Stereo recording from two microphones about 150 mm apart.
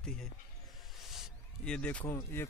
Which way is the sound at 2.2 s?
15° left (ahead or behind).